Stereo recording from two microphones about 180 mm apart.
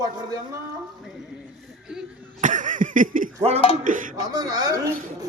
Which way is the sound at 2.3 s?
45° right (ahead or behind).